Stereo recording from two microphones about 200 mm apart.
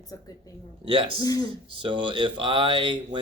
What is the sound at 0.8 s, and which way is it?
Speech, 25° right (ahead or behind).